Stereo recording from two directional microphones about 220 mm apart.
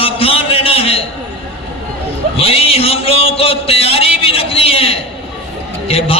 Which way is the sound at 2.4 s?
25° left (ahead or behind).